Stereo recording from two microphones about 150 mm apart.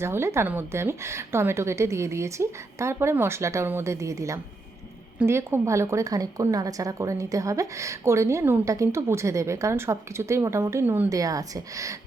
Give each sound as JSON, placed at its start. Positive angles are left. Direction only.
{"t": 0.0, "sound": "a woman's voice", "side_deg": -15}
{"t": 11.2, "sound": "a woman's voice", "side_deg": -25}